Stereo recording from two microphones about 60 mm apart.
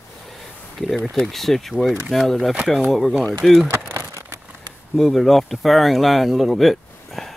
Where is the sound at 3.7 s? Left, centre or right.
Right.